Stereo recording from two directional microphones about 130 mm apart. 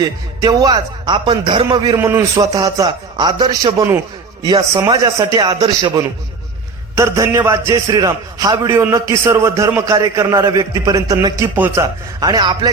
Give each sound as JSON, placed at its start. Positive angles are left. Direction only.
{"t": 0.0, "sound": "a man's voice", "side_deg": -30}
{"t": 2.0, "sound": "a man's voice", "side_deg": -20}
{"t": 6.9, "sound": "a man's voice", "side_deg": -25}
{"t": 11.5, "sound": "a man's voice", "side_deg": -15}